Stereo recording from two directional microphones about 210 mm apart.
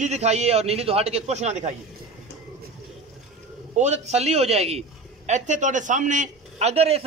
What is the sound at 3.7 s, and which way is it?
A man's voice, 35° right (ahead or behind).